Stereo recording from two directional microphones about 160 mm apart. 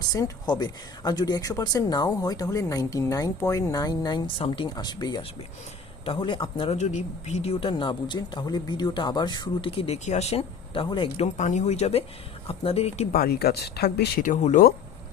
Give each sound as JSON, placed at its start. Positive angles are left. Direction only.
{"t": 0.1, "sound": "speech", "side_deg": 25}
{"t": 6.7, "sound": "speech", "side_deg": 45}
{"t": 11.3, "sound": "speech", "side_deg": 50}
{"t": 13.1, "sound": "speech", "side_deg": 75}
{"t": 14.3, "sound": "speech", "side_deg": 50}